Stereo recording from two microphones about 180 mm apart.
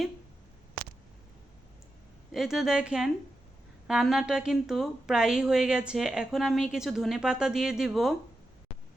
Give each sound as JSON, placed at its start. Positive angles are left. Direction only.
{"t": 2.3, "sound": "a woman's voice", "side_deg": 0}